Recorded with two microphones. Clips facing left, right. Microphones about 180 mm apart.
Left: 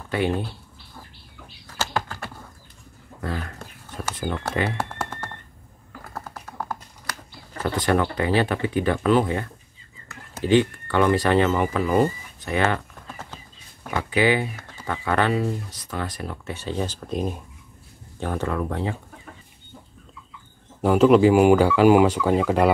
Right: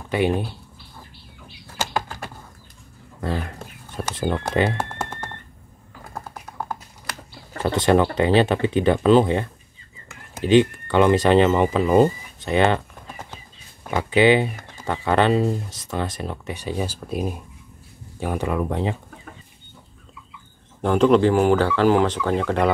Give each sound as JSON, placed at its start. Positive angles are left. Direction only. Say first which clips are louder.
{"t": 0.1, "sound": "speech", "louder": "right 3 dB", "side_deg": -15}
{"t": 1.8, "sound": "a sound", "louder": "right 1 dB", "side_deg": -15}
{"t": 3.2, "sound": "music", "louder": "right 4 dB", "side_deg": -25}
{"t": 6.6, "sound": "computer keyboard", "louder": "right 1 dB", "side_deg": -25}
{"t": 7.6, "sound": "speech", "louder": "right 4 dB", "side_deg": -25}
{"t": 20.8, "sound": "speech", "louder": "left 1 dB", "side_deg": 5}